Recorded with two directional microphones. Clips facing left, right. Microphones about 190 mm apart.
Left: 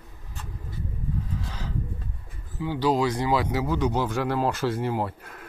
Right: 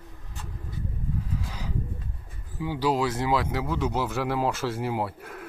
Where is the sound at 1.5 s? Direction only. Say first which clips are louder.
Even; 10° right (ahead or behind).